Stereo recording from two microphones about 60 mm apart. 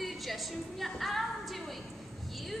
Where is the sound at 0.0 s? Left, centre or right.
Centre.